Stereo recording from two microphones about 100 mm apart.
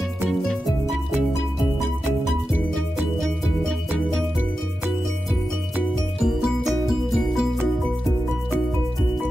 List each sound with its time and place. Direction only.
0.2 s music: centre (ahead or behind)
6.2 s music: 5° right (ahead or behind)